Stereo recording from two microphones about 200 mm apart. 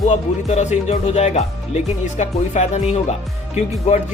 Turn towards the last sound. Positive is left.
turn(degrees=35)  # may be behind; listen again after turning